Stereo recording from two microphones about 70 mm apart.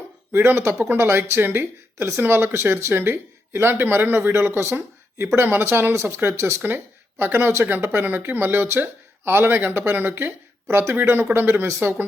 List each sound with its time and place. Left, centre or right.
0.3 s speech: right
6.6 s speech: right